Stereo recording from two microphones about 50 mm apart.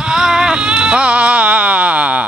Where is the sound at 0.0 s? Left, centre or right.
Centre.